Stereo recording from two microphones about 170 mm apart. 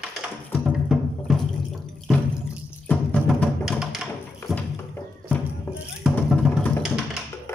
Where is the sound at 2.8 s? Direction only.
10° left (ahead or behind).